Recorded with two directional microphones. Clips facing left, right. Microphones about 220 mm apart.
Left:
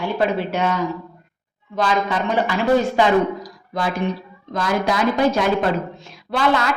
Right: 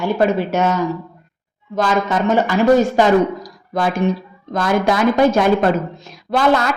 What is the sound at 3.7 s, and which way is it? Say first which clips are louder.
A woman's voice: right 5 dB; 50° right (ahead or behind).